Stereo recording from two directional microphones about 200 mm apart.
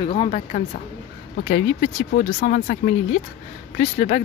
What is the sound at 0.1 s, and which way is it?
Speech, 30° left (ahead or behind).